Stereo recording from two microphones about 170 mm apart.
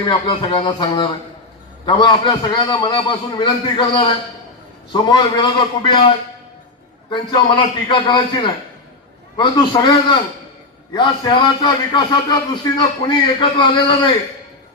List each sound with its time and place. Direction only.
0.0 s a man's voice: 30° left (ahead or behind)